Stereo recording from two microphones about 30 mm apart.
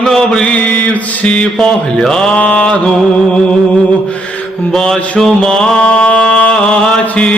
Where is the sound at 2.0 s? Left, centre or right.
Centre.